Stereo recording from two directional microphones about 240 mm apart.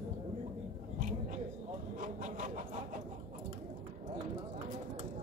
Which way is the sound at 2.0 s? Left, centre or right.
Right.